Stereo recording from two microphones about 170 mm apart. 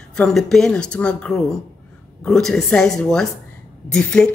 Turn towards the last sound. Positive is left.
turn(degrees=5)  # may be behind; listen again after turning